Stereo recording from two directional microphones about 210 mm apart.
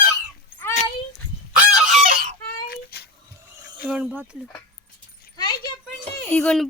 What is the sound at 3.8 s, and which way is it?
Speech, 5° right (ahead or behind).